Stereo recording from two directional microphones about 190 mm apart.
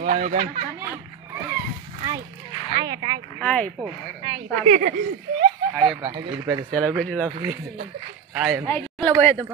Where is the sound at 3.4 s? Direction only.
5° left (ahead or behind).